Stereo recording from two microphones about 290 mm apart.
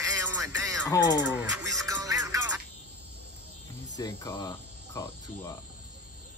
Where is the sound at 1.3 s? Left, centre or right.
Centre.